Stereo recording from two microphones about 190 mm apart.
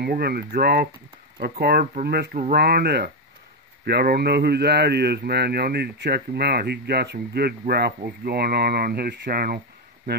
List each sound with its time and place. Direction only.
0.0 s speech: 55° right (ahead or behind)